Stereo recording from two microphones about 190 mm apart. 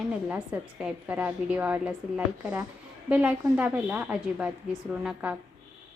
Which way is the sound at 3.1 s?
5° right (ahead or behind).